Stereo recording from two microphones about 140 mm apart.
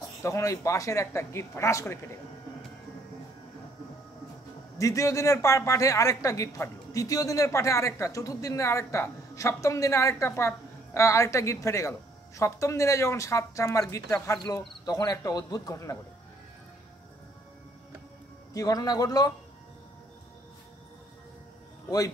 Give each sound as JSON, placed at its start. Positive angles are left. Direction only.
{"t": 0.2, "sound": "speech", "side_deg": 20}
{"t": 4.7, "sound": "speech", "side_deg": 20}
{"t": 18.5, "sound": "speech", "side_deg": 25}